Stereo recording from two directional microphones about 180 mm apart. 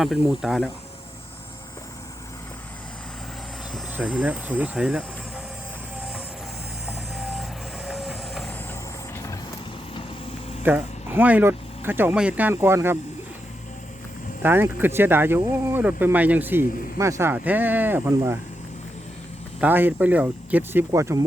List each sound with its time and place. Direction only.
0.0 s speech: centre (ahead or behind)
3.9 s speech: 5° right (ahead or behind)
6.8 s vehicle: 5° right (ahead or behind)
7.9 s train: centre (ahead or behind)
9.1 s vehicle: 15° left (ahead or behind)
10.6 s speech: 10° right (ahead or behind)
14.4 s speech: 10° right (ahead or behind)
19.5 s speech: 10° right (ahead or behind)